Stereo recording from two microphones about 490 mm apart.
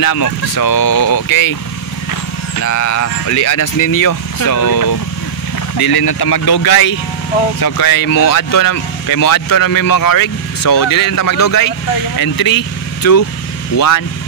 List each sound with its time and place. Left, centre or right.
0.0 s speech: left
2.6 s speech: left